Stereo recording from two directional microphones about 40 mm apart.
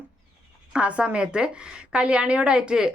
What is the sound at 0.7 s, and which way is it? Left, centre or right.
A woman's voice, right.